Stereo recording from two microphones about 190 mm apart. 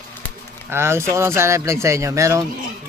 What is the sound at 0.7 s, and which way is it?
Speech, 15° right (ahead or behind).